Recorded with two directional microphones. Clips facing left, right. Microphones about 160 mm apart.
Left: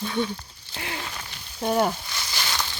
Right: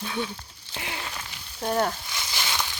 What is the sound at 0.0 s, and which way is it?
Speech, centre (ahead or behind).